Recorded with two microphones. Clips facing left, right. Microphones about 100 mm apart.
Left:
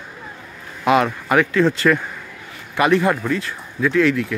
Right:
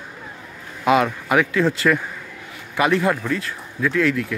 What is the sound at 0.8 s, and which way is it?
A man's voice, centre (ahead or behind).